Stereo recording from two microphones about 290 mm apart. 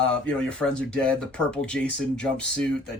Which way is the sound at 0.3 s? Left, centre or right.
Centre.